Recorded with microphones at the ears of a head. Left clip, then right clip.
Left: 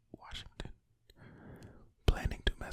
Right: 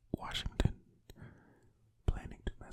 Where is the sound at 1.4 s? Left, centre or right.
Left.